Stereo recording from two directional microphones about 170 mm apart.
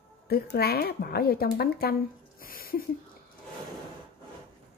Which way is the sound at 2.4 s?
60° left (ahead or behind).